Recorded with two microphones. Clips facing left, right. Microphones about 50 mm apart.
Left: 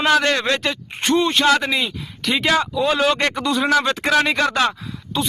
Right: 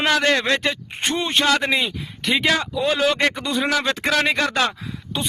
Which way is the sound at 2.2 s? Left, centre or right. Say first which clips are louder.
Left 1 dB; centre.